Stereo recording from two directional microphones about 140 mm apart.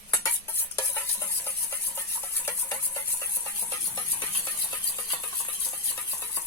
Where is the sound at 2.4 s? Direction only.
20° left (ahead or behind).